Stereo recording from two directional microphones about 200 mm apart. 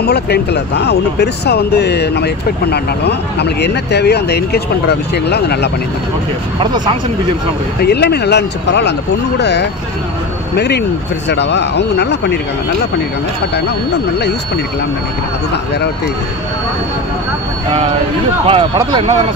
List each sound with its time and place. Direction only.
0.0 s speech: 55° left (ahead or behind)
6.6 s speech: 25° right (ahead or behind)
7.8 s speech: 55° left (ahead or behind)
18.5 s speech: 25° right (ahead or behind)